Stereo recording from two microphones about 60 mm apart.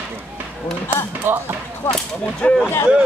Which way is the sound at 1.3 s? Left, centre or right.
Right.